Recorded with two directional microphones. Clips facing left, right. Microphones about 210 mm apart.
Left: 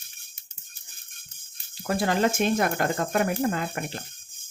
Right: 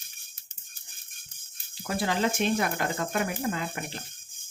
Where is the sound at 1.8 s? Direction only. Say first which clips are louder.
Left 4 dB; 50° left (ahead or behind).